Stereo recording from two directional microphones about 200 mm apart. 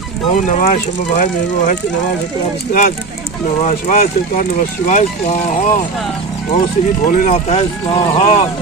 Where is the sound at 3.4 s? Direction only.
40° left (ahead or behind).